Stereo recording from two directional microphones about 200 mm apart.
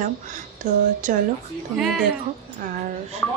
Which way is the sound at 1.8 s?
Centre (ahead or behind).